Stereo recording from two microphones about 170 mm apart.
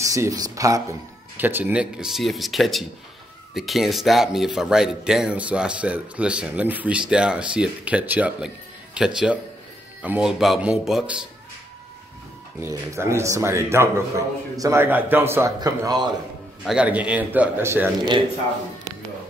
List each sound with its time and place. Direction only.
0.0 s a man's voice: 20° right (ahead or behind)
12.5 s a man's voice: 15° right (ahead or behind)
16.6 s a man's voice: 5° right (ahead or behind)